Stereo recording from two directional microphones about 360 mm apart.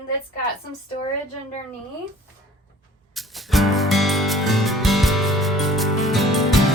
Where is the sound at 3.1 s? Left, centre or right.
Centre.